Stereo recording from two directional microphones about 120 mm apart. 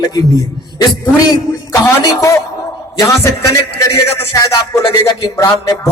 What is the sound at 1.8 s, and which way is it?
Speech, 25° left (ahead or behind).